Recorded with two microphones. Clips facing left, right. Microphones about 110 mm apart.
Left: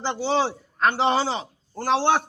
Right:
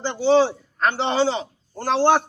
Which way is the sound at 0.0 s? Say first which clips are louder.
Right 6 dB; centre (ahead or behind).